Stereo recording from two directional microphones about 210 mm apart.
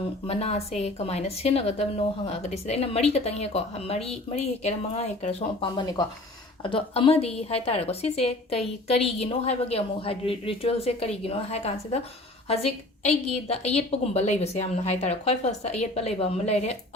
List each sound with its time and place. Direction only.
0.3 s a woman's voice: 30° left (ahead or behind)